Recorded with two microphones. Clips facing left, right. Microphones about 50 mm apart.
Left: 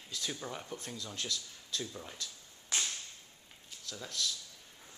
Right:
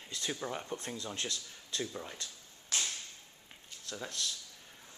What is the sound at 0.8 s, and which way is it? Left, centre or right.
Speech, right.